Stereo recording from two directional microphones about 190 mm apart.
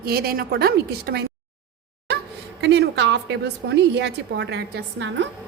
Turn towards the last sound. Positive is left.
turn(degrees=-65)  # may be behind; listen again after turning